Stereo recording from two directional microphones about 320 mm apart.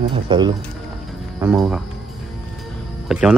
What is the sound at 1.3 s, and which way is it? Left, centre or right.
Speech, centre.